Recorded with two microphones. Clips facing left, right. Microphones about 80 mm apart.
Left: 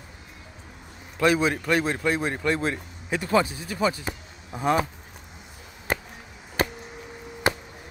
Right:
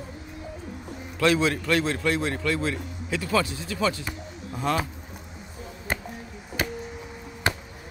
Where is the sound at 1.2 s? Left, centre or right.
Centre.